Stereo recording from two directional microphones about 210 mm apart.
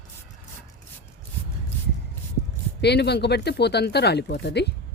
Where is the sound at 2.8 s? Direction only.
50° left (ahead or behind).